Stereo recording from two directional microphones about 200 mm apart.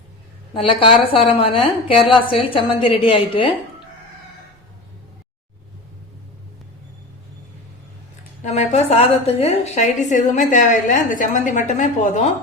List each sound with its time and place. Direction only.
0.5 s a woman's voice: 25° left (ahead or behind)
8.4 s a woman's voice: 35° left (ahead or behind)